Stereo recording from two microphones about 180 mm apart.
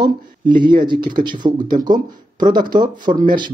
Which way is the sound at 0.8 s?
25° right (ahead or behind).